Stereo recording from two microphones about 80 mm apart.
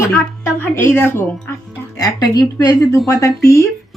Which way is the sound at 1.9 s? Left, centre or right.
Left.